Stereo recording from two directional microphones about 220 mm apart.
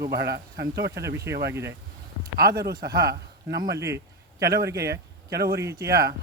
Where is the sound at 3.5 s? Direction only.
50° right (ahead or behind).